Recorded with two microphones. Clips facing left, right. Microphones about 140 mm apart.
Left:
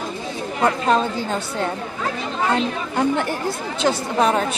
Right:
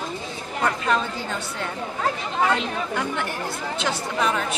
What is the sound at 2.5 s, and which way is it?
A woman's voice, 35° left (ahead or behind).